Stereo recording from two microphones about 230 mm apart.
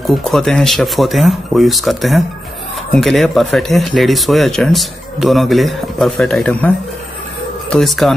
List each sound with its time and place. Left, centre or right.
0.0 s speech: centre
7.7 s speech: centre